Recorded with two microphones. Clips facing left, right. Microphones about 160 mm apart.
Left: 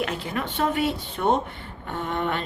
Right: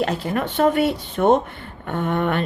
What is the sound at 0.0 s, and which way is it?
A woman's voice, 45° right (ahead or behind).